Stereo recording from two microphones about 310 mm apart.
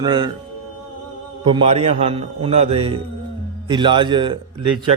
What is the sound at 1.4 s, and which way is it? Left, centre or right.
A man's voice, centre.